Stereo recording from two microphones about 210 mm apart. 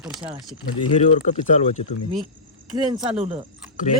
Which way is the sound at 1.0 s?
30° left (ahead or behind).